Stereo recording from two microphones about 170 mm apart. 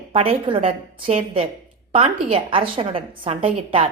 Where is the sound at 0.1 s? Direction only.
35° right (ahead or behind).